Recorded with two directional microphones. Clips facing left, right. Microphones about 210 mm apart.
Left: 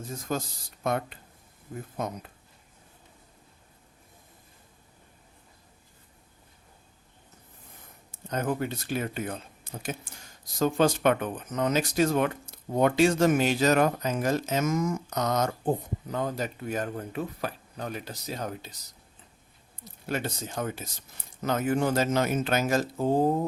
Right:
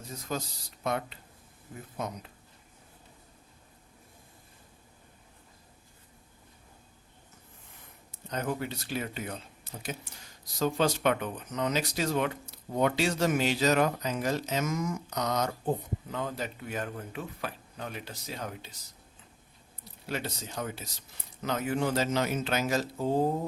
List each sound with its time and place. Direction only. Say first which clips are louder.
0.1 s speech: left 3 dB; 50° left (ahead or behind)
8.1 s speech: left 4 dB; 50° left (ahead or behind)
19.8 s speech: left 4 dB; 50° left (ahead or behind)